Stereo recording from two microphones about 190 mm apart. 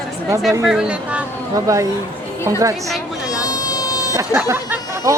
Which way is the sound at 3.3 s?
20° left (ahead or behind).